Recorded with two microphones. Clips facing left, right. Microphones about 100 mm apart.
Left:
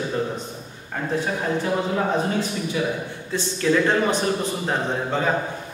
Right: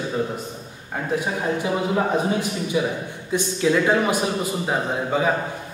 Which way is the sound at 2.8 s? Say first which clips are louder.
Right 2 dB; 15° right (ahead or behind).